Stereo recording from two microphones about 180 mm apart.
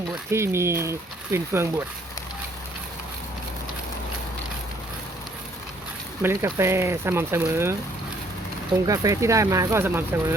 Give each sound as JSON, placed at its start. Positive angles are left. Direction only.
{"t": 0.3, "sound": "speech", "side_deg": -15}
{"t": 6.2, "sound": "speech", "side_deg": -15}
{"t": 8.9, "sound": "speech", "side_deg": -20}